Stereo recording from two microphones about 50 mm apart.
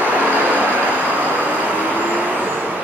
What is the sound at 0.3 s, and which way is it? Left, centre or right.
Vehicle, right.